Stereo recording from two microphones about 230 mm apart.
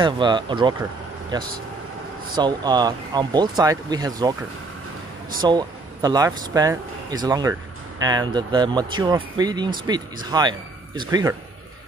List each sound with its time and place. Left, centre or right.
0.0 s speech: centre
2.3 s speech: centre
5.4 s speech: centre